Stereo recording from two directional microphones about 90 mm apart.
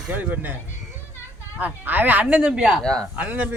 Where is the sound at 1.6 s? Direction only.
20° right (ahead or behind).